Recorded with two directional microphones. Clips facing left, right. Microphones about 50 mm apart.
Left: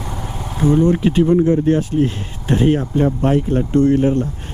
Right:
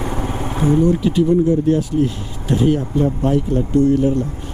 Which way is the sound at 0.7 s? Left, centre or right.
Left.